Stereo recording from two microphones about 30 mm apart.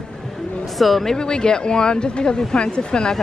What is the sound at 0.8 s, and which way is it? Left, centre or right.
Speech, centre.